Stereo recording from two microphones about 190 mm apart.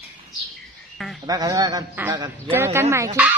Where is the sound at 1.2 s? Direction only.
20° right (ahead or behind).